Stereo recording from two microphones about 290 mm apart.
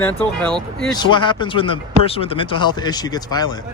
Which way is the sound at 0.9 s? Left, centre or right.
Centre.